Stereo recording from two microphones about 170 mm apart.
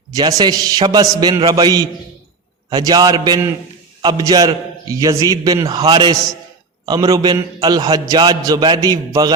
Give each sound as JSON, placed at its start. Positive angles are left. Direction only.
{"t": 0.1, "sound": "a man's voice", "side_deg": -20}